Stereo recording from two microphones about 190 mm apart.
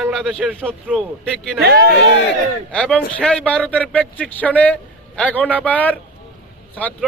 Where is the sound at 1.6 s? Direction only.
55° right (ahead or behind).